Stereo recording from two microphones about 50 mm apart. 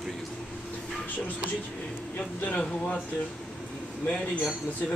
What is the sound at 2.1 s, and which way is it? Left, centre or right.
Speech, left.